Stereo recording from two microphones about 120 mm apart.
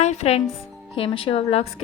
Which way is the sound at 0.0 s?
70° left (ahead or behind).